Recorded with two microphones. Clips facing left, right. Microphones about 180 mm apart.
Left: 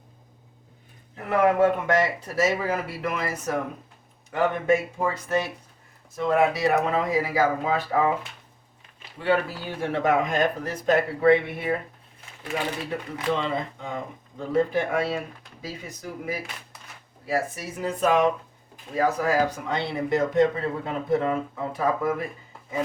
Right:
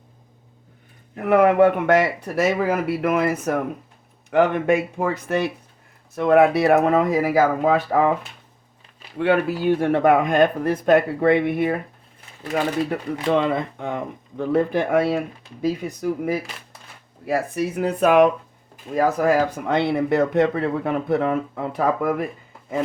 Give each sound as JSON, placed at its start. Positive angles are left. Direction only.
{"t": 1.1, "sound": "speech", "side_deg": -60}
{"t": 9.1, "sound": "speech", "side_deg": -60}
{"t": 13.3, "sound": "speech", "side_deg": -60}